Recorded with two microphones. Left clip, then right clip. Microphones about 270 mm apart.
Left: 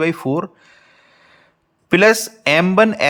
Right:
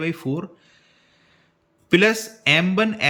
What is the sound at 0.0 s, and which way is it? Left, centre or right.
Speech, centre.